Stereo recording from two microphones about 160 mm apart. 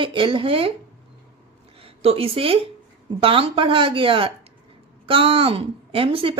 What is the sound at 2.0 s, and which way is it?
Speech, 35° right (ahead or behind).